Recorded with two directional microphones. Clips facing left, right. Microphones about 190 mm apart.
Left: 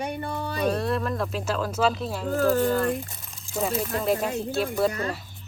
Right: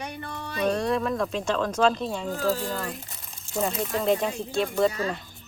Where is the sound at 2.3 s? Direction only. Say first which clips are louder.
Left 7 dB; 60° left (ahead or behind).